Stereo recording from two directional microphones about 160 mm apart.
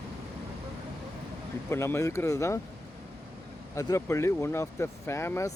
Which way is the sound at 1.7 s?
15° left (ahead or behind).